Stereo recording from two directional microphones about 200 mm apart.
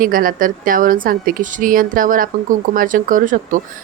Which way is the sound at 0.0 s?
45° right (ahead or behind).